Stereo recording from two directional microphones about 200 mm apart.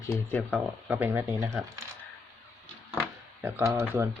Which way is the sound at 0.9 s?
10° right (ahead or behind).